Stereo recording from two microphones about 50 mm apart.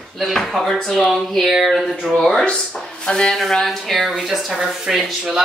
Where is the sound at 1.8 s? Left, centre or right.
Centre.